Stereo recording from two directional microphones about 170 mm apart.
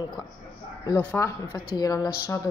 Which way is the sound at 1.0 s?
10° left (ahead or behind).